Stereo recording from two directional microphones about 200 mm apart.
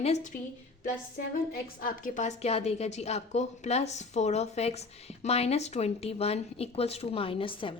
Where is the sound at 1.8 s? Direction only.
45° left (ahead or behind).